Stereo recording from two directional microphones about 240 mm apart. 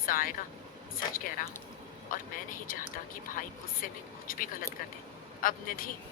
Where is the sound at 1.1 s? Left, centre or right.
Left.